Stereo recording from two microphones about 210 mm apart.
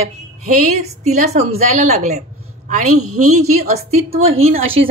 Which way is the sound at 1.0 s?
30° right (ahead or behind).